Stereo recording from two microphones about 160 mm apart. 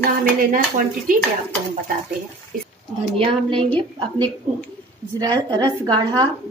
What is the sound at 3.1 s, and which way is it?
A woman's voice, 35° right (ahead or behind).